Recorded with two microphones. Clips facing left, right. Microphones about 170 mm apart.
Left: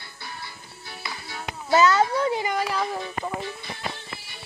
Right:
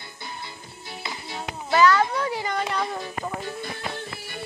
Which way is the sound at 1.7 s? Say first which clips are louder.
Even; 25° left (ahead or behind).